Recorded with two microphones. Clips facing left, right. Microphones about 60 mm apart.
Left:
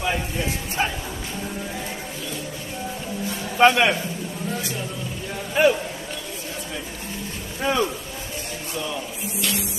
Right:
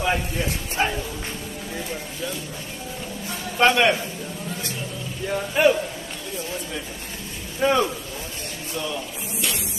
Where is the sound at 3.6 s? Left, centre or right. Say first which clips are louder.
Left 1 dB; centre.